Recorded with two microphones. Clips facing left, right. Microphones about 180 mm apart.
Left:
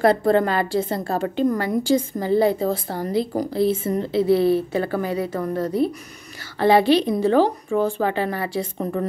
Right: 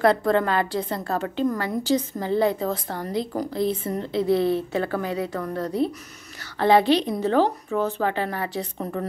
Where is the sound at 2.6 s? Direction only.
35° left (ahead or behind).